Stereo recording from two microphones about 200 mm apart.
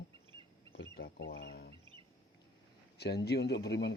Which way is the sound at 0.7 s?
50° left (ahead or behind).